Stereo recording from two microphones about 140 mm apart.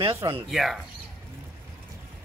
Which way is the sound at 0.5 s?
Centre (ahead or behind).